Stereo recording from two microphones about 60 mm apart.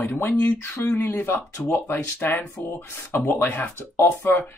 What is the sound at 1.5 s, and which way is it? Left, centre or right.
Speech, left.